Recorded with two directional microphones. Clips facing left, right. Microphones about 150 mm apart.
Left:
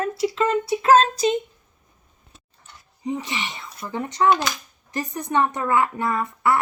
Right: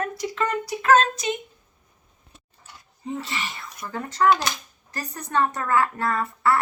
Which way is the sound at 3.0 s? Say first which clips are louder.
Left 3 dB; 15° left (ahead or behind).